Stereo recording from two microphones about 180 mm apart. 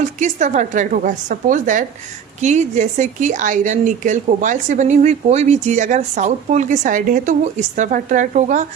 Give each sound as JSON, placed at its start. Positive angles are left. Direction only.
{"t": 0.2, "sound": "speech", "side_deg": -45}